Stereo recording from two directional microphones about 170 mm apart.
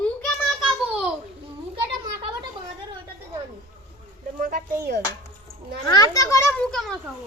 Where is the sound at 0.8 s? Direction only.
5° right (ahead or behind).